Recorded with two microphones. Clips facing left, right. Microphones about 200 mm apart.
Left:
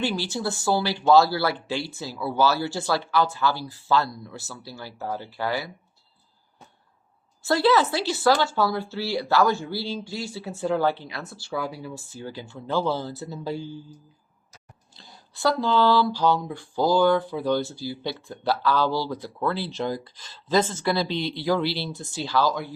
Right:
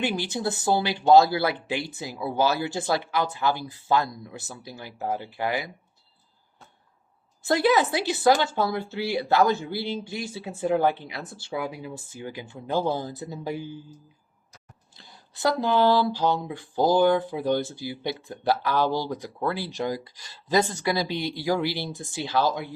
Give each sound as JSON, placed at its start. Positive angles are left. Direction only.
{"t": 0.0, "sound": "a woman's voice", "side_deg": -20}
{"t": 7.4, "sound": "a woman's voice", "side_deg": -20}
{"t": 15.3, "sound": "a woman's voice", "side_deg": -20}